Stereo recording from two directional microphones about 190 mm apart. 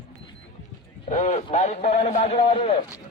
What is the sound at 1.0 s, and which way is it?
Clip-clop, 40° left (ahead or behind).